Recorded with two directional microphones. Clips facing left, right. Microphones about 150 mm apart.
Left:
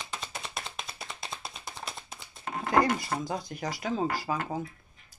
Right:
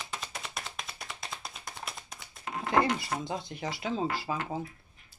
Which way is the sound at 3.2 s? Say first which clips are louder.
Left 2 dB; 25° right (ahead or behind).